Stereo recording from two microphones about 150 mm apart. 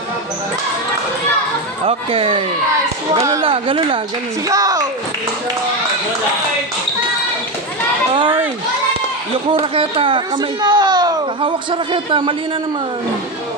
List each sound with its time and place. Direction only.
1.9 s speech: 35° right (ahead or behind)
3.4 s speech: 35° right (ahead or behind)
4.5 s speech: 25° right (ahead or behind)
9.5 s speech: 35° right (ahead or behind)